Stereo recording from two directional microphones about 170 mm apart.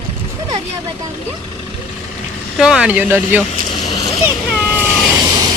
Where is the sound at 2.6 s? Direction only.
5° right (ahead or behind).